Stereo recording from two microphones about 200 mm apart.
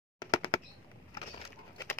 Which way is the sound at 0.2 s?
20° left (ahead or behind).